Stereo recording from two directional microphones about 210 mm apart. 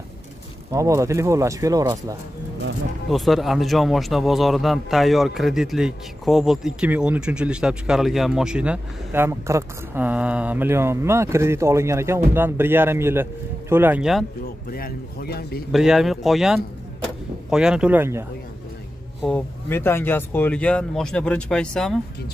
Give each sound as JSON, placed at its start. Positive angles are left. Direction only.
{"t": 0.7, "sound": "a man's voice", "side_deg": -15}
{"t": 3.1, "sound": "a man's voice", "side_deg": 0}
{"t": 14.7, "sound": "speech", "side_deg": 45}
{"t": 15.7, "sound": "speech", "side_deg": 0}
{"t": 19.2, "sound": "speech", "side_deg": 10}